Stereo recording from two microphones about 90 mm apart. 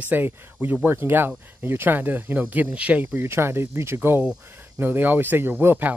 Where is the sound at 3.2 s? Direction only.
25° right (ahead or behind).